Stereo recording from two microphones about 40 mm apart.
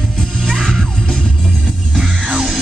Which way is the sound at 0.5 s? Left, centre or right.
Centre.